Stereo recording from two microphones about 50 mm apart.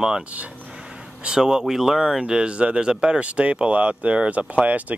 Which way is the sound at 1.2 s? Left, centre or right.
Centre.